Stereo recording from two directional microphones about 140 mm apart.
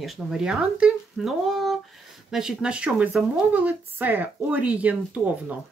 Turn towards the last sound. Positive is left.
turn(degrees=-10)  # may be behind; listen again after turning